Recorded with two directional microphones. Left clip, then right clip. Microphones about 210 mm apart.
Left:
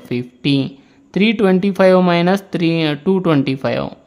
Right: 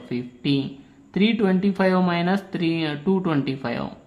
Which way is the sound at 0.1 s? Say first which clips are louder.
Left 6 dB; 40° left (ahead or behind).